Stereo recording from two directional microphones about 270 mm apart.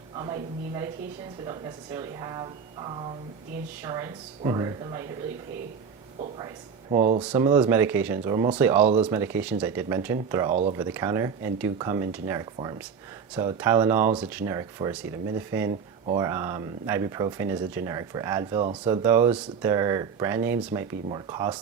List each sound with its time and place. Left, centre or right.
0.2 s speech: centre
7.0 s speech: right
7.3 s speech: centre